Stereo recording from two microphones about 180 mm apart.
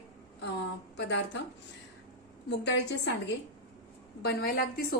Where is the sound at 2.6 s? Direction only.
75° left (ahead or behind).